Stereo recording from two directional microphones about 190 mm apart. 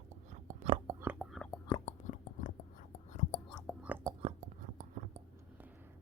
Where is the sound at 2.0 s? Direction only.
40° left (ahead or behind).